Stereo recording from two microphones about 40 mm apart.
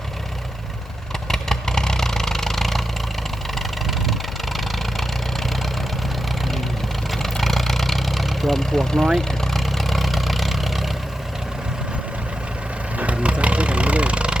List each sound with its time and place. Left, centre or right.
1.3 s vehicle: centre
3.8 s engine: centre
7.1 s vehicle: centre
13.0 s vehicle: right